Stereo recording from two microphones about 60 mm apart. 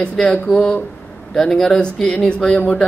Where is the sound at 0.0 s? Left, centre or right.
Centre.